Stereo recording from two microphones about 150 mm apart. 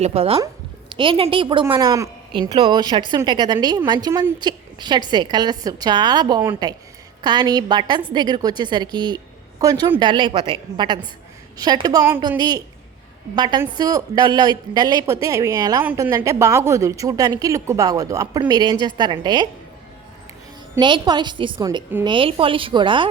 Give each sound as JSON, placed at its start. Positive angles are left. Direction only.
{"t": 0.0, "sound": "a woman's voice", "side_deg": -40}
{"t": 20.7, "sound": "a woman's voice", "side_deg": -30}